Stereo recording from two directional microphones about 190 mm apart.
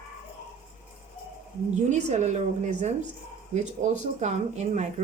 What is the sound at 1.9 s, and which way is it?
Speech, 35° right (ahead or behind).